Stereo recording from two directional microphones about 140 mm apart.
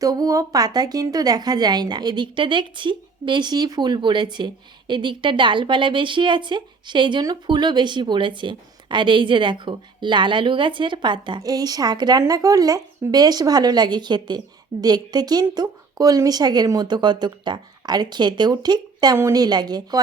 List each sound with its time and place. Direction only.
0.0 s a woman's voice: 25° right (ahead or behind)